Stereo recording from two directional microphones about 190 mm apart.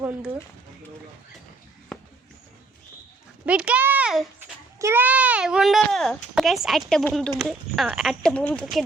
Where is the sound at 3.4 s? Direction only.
5° right (ahead or behind).